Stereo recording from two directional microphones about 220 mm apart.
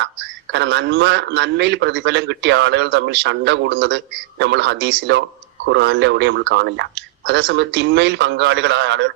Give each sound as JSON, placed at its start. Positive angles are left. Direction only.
{"t": 0.0, "sound": "a man's voice", "side_deg": -55}